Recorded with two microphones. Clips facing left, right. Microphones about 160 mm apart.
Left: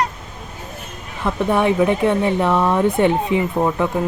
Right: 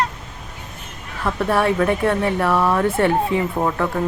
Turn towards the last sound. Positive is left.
turn(degrees=15)  # may be behind; listen again after turning